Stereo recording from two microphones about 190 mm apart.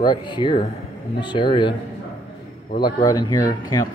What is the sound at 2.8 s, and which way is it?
Speech, 20° left (ahead or behind).